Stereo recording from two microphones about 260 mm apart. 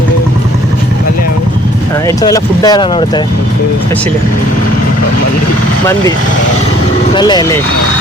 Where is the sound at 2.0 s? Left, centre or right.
Centre.